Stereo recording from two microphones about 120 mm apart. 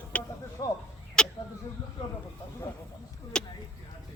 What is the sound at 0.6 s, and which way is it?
Speech, 35° left (ahead or behind).